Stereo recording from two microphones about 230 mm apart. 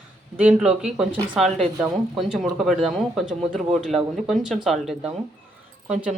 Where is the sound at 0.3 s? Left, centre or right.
Centre.